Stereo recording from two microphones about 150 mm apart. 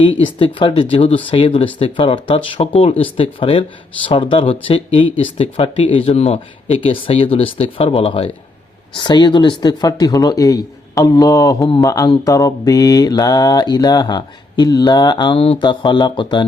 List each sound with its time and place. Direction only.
0.0 s speech: 35° left (ahead or behind)
9.0 s mantra: 30° left (ahead or behind)